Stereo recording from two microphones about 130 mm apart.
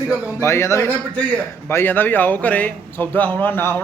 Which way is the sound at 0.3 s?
20° left (ahead or behind).